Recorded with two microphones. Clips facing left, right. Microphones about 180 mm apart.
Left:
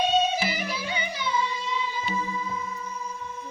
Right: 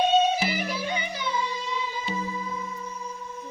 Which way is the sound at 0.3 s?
40° right (ahead or behind).